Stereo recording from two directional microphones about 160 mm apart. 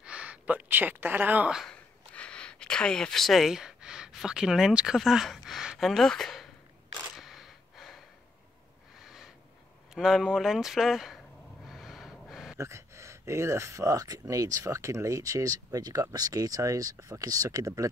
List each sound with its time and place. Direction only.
0.0 s speech: 10° right (ahead or behind)
7.2 s gasp: centre (ahead or behind)
9.0 s a sound: centre (ahead or behind)
9.9 s speech: centre (ahead or behind)
11.6 s a sound: centre (ahead or behind)
12.5 s speech: 15° right (ahead or behind)